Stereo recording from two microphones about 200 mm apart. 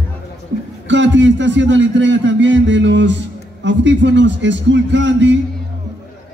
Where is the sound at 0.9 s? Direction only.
65° right (ahead or behind).